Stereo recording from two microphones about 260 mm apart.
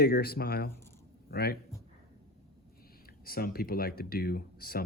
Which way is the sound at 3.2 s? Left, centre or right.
Left.